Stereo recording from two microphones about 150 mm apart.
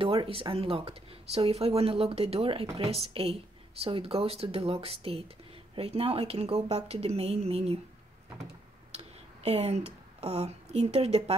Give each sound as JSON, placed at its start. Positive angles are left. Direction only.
{"t": 0.0, "sound": "a woman's voice", "side_deg": -40}
{"t": 8.9, "sound": "speech", "side_deg": -45}